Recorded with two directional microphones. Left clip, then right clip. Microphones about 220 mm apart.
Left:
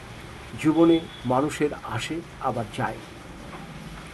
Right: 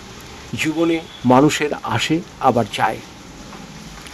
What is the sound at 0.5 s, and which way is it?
Speech, 45° right (ahead or behind).